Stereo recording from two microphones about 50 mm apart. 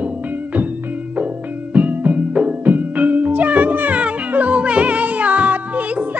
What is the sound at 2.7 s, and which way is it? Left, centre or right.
Music, right.